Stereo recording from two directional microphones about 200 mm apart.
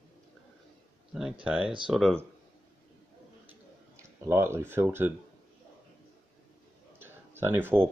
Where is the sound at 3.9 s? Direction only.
15° right (ahead or behind).